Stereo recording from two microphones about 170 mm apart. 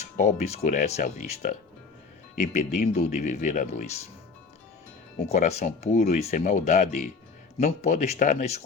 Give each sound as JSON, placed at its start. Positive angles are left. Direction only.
{"t": 0.2, "sound": "speech", "side_deg": 40}
{"t": 5.1, "sound": "speech", "side_deg": 40}